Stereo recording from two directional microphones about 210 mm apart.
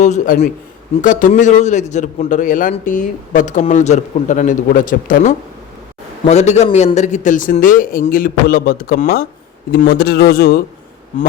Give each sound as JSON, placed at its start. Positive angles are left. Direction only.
{"t": 0.0, "sound": "a man's voice", "side_deg": 35}